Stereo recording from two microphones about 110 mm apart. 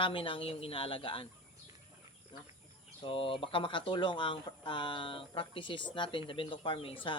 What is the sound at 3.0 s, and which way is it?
Speech, 55° left (ahead or behind).